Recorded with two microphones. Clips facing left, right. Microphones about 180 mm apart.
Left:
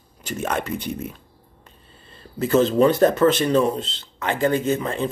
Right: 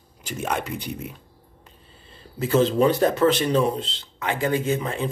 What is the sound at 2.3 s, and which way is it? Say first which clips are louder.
Speech: left 2 dB; 10° right (ahead or behind).